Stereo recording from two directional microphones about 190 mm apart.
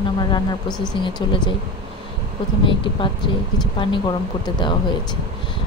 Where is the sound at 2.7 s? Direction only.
25° left (ahead or behind).